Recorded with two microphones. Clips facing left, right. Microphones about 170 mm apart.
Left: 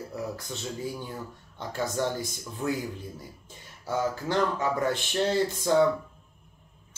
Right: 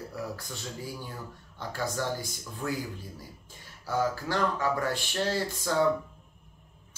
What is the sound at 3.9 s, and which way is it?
Speech, 20° left (ahead or behind).